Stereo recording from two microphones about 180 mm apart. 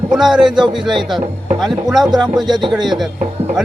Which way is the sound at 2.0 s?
25° right (ahead or behind).